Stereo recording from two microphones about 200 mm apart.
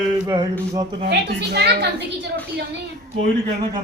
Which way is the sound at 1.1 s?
55° right (ahead or behind).